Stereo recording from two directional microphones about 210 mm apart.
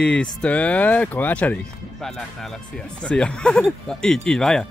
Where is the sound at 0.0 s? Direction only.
5° left (ahead or behind).